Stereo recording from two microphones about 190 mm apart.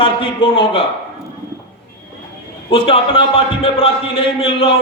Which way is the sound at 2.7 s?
30° left (ahead or behind).